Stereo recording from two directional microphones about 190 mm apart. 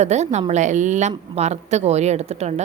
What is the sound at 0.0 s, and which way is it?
A woman's voice, 35° right (ahead or behind).